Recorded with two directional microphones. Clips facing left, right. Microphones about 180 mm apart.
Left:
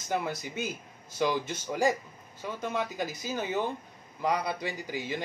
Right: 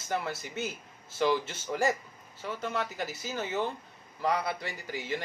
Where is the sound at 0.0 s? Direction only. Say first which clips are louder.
Left 2 dB; 15° left (ahead or behind).